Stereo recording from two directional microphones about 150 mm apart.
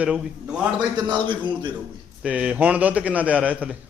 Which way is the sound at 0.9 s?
30° right (ahead or behind).